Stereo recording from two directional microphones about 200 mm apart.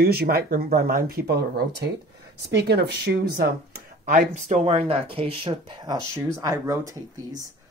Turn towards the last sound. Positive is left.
turn(degrees=-15)  # may be behind; listen again after turning